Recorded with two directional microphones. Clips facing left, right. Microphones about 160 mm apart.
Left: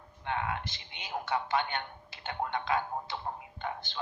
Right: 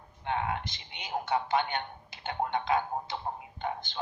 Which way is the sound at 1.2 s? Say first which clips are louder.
Right 2 dB; 20° right (ahead or behind).